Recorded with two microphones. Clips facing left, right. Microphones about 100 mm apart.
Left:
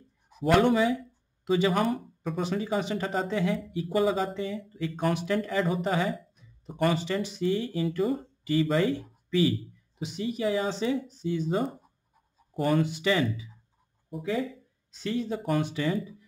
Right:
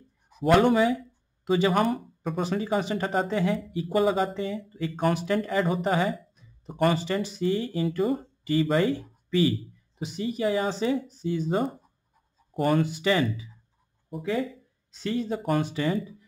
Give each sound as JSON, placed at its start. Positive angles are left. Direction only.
{"t": 0.4, "sound": "speech", "side_deg": -50}
{"t": 7.0, "sound": "speech", "side_deg": -40}
{"t": 9.9, "sound": "speech", "side_deg": -40}